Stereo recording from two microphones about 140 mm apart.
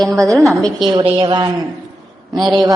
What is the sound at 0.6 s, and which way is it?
Speech, 35° right (ahead or behind).